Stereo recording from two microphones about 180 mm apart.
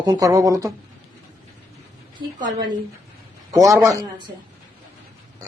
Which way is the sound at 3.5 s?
15° right (ahead or behind).